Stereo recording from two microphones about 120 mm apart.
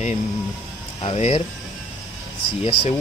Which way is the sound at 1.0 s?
55° left (ahead or behind).